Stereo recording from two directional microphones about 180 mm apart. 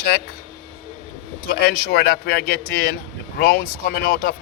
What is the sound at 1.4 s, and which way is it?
Speech, 60° left (ahead or behind).